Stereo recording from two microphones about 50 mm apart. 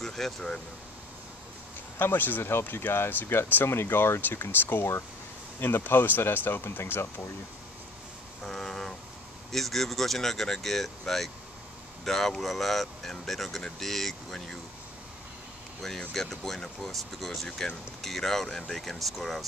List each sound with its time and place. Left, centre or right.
0.0 s speech: centre
2.0 s speech: left
8.5 s speech: centre
16.1 s speech: centre